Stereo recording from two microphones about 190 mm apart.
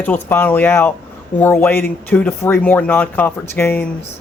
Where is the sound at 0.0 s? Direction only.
10° left (ahead or behind).